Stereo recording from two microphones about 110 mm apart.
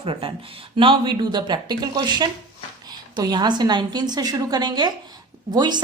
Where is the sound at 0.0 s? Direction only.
55° right (ahead or behind).